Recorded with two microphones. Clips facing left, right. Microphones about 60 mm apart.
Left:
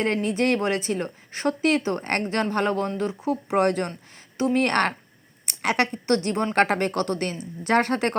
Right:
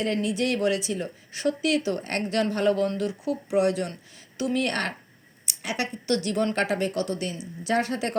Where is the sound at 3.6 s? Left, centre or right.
Left.